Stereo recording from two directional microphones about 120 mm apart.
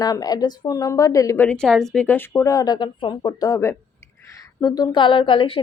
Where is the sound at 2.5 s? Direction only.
30° left (ahead or behind).